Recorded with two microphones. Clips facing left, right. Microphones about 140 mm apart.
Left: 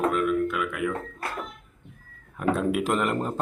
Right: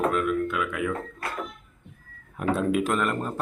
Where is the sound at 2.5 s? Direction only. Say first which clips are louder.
Right 1 dB; 5° left (ahead or behind).